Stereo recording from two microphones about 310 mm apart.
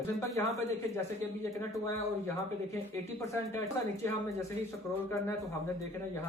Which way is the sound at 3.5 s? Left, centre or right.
Centre.